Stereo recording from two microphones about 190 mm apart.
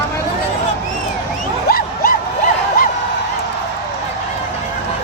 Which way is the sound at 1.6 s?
50° left (ahead or behind).